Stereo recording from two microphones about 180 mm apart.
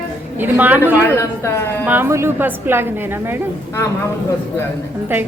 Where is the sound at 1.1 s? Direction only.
15° left (ahead or behind).